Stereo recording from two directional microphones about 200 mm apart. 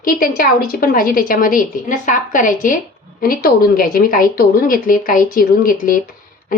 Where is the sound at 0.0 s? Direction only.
45° left (ahead or behind).